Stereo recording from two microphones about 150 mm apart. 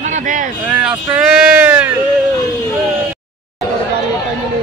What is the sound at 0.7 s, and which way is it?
Speech, 10° right (ahead or behind).